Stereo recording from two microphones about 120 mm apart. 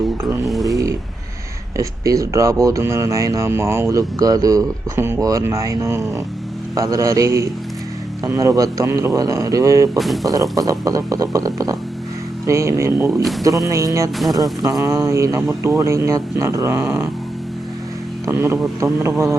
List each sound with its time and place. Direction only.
0.6 s a sound: 30° right (ahead or behind)
1.7 s speech: 25° right (ahead or behind)
18.3 s speech: 20° right (ahead or behind)